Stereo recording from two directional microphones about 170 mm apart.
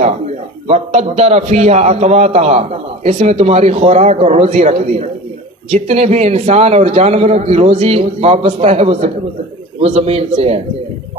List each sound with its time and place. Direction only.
0.7 s a man's voice: 40° right (ahead or behind)